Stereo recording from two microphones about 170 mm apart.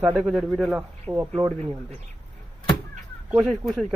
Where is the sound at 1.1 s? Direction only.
15° right (ahead or behind).